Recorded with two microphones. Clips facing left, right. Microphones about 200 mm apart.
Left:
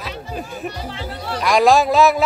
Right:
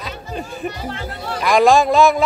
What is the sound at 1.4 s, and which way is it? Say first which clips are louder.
Speech: right 1 dB; centre (ahead or behind).